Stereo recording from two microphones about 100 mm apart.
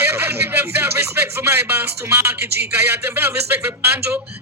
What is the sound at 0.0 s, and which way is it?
Speech, 25° right (ahead or behind).